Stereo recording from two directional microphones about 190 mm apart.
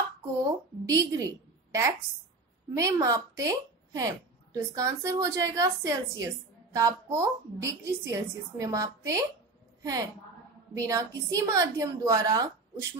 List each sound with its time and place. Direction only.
0.4 s a woman's voice: 20° right (ahead or behind)
10.7 s a woman's voice: 15° right (ahead or behind)